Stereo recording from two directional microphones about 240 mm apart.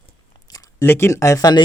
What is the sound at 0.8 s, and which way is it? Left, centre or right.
Speech, centre.